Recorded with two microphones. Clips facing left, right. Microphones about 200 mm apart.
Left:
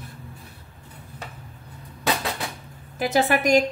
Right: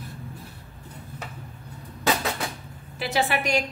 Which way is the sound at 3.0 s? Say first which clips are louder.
Left 4 dB; 45° left (ahead or behind).